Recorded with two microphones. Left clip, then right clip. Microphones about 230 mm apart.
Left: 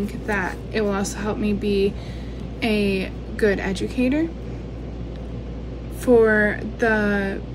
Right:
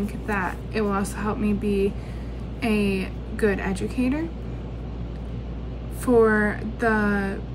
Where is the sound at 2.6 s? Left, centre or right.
Centre.